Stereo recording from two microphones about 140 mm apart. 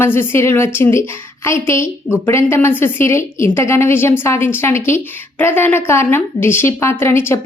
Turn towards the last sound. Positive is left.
turn(degrees=15)  # may be behind; listen again after turning